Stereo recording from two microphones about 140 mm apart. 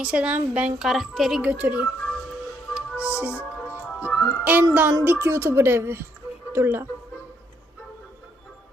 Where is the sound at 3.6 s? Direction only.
10° left (ahead or behind).